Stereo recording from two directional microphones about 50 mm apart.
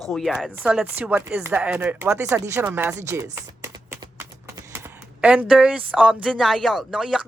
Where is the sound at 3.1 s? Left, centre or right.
Right.